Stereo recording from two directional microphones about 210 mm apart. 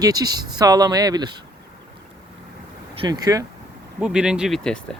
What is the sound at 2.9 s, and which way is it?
Speech, 20° right (ahead or behind).